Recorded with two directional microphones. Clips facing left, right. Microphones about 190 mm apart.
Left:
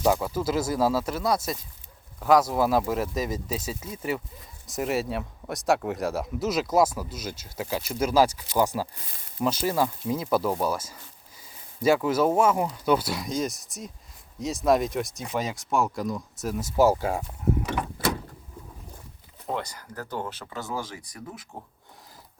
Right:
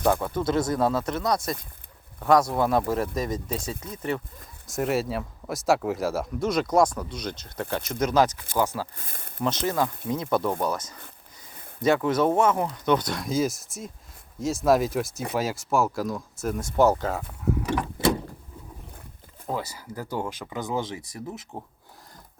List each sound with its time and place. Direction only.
0.2 s speech: 5° left (ahead or behind)
9.0 s speech: 50° right (ahead or behind)
9.4 s speech: 10° left (ahead or behind)
19.5 s speech: 5° right (ahead or behind); by 21.4 s 25° right (ahead or behind)